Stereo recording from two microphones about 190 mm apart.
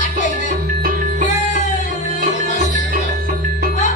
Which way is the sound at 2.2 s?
40° right (ahead or behind).